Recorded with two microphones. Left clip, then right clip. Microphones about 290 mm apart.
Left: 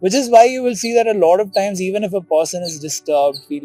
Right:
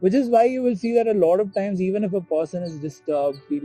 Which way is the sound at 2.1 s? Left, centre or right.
Left.